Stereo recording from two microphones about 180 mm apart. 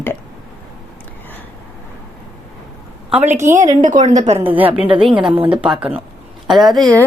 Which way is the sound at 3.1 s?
10° right (ahead or behind).